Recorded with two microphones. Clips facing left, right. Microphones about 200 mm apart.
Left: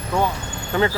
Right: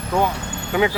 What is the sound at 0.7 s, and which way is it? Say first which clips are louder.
Speech: right 1 dB; 10° right (ahead or behind).